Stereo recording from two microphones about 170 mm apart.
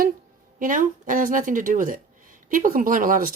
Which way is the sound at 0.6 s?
50° right (ahead or behind).